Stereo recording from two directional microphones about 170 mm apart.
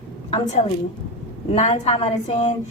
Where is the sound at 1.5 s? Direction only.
40° left (ahead or behind).